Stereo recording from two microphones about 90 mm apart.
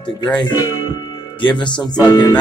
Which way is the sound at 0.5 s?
40° left (ahead or behind).